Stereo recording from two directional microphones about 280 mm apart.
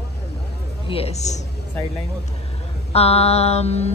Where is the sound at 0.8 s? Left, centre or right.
Left.